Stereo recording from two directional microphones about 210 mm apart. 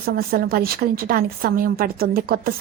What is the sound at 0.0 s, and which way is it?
A woman's voice, 45° right (ahead or behind).